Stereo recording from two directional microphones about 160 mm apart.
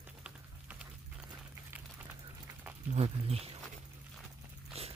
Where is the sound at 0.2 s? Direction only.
5° right (ahead or behind).